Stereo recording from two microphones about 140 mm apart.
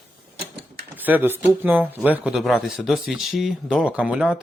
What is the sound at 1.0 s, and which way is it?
Speech, 15° right (ahead or behind).